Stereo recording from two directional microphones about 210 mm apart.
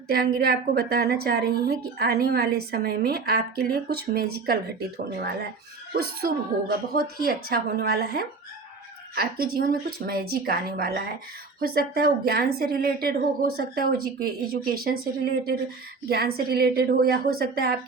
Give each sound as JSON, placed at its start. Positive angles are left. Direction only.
{"t": 0.1, "sound": "a woman's voice", "side_deg": -45}
{"t": 5.9, "sound": "a woman's voice", "side_deg": -45}